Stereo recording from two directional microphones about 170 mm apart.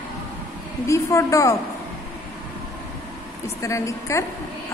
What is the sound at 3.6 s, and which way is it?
Speech, 15° left (ahead or behind).